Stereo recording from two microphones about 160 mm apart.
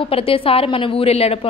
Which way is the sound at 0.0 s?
35° left (ahead or behind).